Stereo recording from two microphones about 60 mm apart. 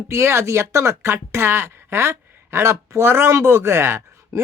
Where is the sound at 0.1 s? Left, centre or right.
Right.